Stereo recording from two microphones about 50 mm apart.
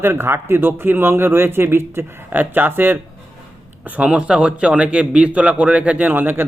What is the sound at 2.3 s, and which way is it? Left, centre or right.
Speech, right.